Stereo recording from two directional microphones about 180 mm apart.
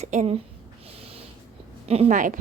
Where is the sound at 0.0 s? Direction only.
40° right (ahead or behind).